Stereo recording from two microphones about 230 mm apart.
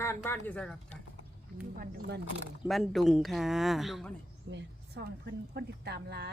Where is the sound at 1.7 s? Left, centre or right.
Right.